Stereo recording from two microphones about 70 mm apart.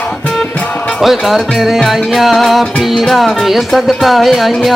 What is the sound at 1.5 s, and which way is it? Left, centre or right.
Music, centre.